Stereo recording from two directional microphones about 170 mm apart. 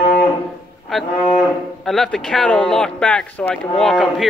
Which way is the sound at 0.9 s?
Centre (ahead or behind).